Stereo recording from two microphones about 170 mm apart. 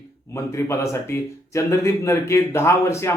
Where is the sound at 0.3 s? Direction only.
15° left (ahead or behind).